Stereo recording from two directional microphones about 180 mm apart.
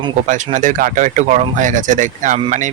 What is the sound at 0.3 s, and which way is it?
Speech, 45° right (ahead or behind).